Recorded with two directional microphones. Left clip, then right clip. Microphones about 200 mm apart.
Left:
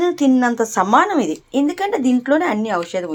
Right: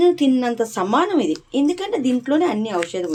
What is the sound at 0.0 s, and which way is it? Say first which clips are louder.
A woman's voice: left 1 dB; 15° left (ahead or behind).